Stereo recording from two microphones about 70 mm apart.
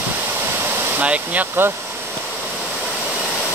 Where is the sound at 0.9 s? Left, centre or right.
Right.